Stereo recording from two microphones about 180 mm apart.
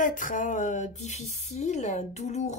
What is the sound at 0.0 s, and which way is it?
Speech, 45° left (ahead or behind).